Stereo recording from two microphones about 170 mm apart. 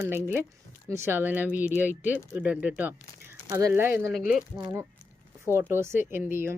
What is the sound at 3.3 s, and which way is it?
Speech, 20° right (ahead or behind).